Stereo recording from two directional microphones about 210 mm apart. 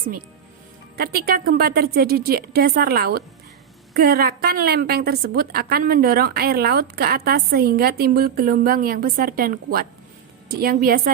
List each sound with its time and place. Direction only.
0.9 s a woman's voice: 45° right (ahead or behind)